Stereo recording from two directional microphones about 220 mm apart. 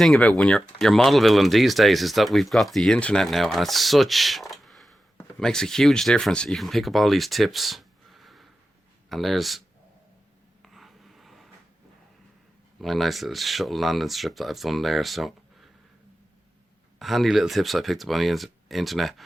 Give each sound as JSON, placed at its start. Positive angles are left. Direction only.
{"t": 0.0, "sound": "speech", "side_deg": 0}
{"t": 10.6, "sound": "writing", "side_deg": 0}
{"t": 12.8, "sound": "speech", "side_deg": 0}
{"t": 17.0, "sound": "speech", "side_deg": 0}